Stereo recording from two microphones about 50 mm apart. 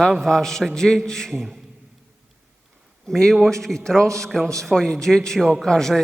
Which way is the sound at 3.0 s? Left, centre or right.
Centre.